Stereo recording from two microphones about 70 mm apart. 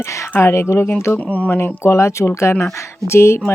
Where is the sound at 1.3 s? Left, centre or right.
Left.